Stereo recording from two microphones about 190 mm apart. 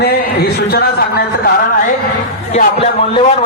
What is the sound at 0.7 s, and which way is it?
Speech, 55° left (ahead or behind).